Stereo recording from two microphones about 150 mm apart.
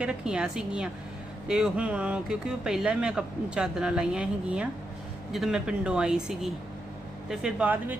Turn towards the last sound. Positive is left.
turn(degrees=-10)  # may be behind; listen again after turning